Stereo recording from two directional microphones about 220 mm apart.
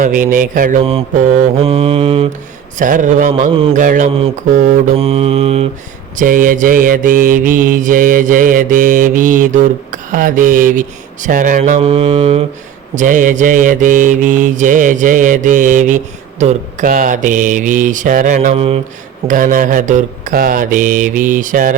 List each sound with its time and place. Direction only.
0.0 s mantra: 40° right (ahead or behind)
6.1 s mantra: 40° right (ahead or behind)
19.3 s mantra: 35° right (ahead or behind)